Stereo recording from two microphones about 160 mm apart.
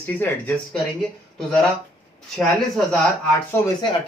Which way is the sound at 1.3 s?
Centre (ahead or behind).